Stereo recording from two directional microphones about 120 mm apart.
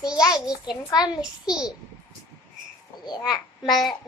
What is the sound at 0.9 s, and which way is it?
Speech, 35° left (ahead or behind).